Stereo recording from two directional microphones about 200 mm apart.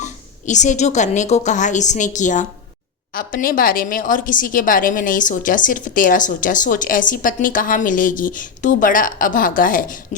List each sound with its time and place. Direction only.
0.0 s a woman's voice: 35° left (ahead or behind)